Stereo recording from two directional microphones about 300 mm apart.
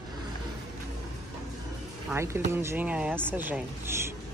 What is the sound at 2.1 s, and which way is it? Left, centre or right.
Speech, centre.